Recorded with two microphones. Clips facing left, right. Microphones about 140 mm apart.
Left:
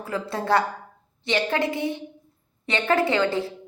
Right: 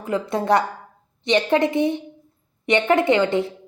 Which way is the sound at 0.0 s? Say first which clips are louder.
Right 5 dB; 20° right (ahead or behind).